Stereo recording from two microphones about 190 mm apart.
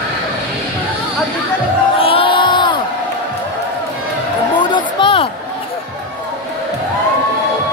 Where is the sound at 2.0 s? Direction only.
30° left (ahead or behind).